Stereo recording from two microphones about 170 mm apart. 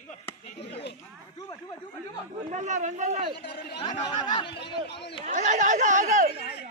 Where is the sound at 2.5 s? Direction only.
45° right (ahead or behind).